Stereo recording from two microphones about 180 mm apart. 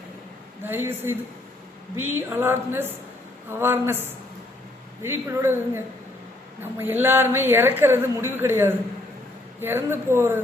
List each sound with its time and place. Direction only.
0.6 s a woman's voice: 10° right (ahead or behind)
5.0 s a woman's voice: 15° right (ahead or behind)